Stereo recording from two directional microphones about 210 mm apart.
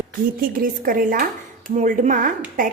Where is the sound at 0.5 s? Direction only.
40° right (ahead or behind).